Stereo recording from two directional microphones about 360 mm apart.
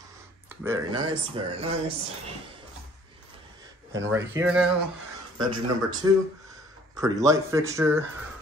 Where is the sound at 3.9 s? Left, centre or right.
Centre.